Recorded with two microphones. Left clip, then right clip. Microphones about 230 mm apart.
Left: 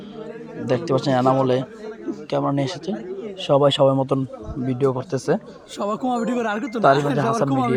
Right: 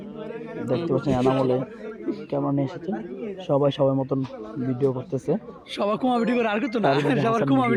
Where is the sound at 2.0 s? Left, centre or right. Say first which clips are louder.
Left 4 dB; centre.